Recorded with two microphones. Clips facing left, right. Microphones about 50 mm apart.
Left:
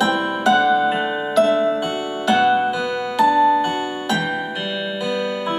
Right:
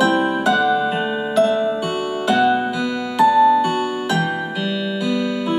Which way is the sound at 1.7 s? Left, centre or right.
Centre.